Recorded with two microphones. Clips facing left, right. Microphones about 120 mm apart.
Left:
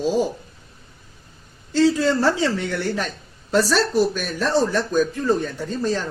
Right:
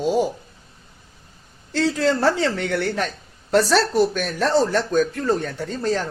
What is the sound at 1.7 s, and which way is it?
Speech, 65° right (ahead or behind).